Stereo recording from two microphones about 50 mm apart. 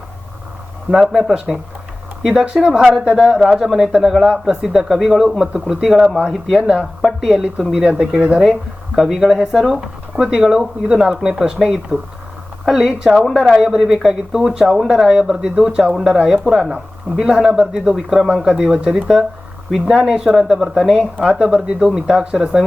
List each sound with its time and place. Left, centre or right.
0.9 s speech: centre
6.6 s speech: centre
7.0 s speech: centre
20.1 s speech: centre
21.2 s speech: centre